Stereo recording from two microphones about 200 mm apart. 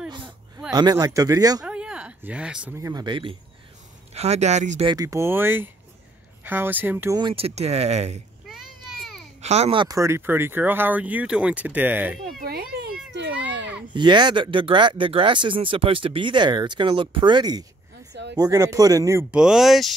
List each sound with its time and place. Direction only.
0.7 s speech: 20° right (ahead or behind)
1.6 s a sound: 5° right (ahead or behind)
2.8 s speech: 20° right (ahead or behind); by 4.8 s 35° right (ahead or behind)
4.8 s speech: 20° right (ahead or behind)
7.2 s speech: 25° right (ahead or behind)
8.5 s a sound: centre (ahead or behind)
9.4 s speech: 30° right (ahead or behind); by 12.2 s 10° right (ahead or behind)
12.4 s children playing: 50° right (ahead or behind)
13.1 s children playing: 60° right (ahead or behind)
13.9 s speech: 20° right (ahead or behind)
19.3 s speech: 5° right (ahead or behind)